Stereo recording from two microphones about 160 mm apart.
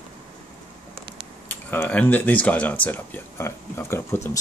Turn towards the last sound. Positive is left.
turn(degrees=15)  # may be behind; listen again after turning